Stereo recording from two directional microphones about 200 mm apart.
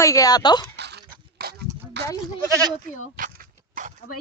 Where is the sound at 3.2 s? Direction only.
45° right (ahead or behind).